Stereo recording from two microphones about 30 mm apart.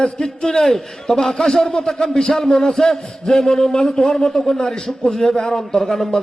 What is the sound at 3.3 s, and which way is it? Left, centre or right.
A woman's voice, left.